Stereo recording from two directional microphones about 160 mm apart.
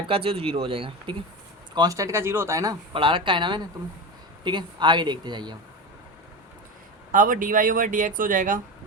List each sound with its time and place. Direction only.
0.1 s speech: 35° right (ahead or behind)
1.7 s speech: 25° right (ahead or behind)
2.9 s speech: 30° right (ahead or behind)
7.1 s speech: 55° right (ahead or behind)